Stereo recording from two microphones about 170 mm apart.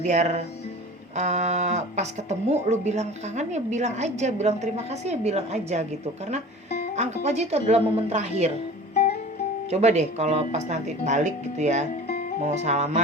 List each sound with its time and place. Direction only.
0.0 s a woman's voice: 45° right (ahead or behind)
6.9 s a woman's voice: 40° right (ahead or behind)
9.6 s a woman's voice: 40° right (ahead or behind)